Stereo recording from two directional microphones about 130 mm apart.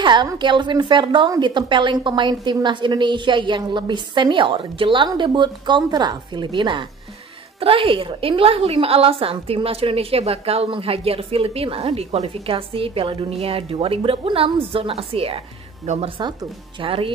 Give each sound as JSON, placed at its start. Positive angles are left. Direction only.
{"t": 0.0, "sound": "a woman's voice", "side_deg": -35}
{"t": 16.8, "sound": "a woman's voice", "side_deg": -45}